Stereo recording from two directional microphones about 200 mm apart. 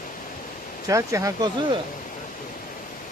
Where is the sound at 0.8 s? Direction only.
15° right (ahead or behind).